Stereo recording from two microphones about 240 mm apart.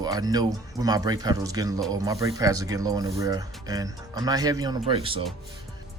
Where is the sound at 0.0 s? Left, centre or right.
Centre.